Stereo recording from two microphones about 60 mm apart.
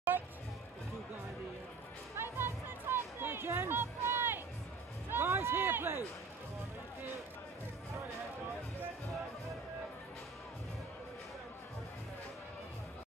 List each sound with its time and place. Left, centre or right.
2.1 s music: right
5.1 s run: right